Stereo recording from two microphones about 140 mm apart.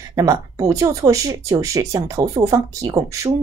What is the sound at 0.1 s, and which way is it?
Speech, 25° right (ahead or behind).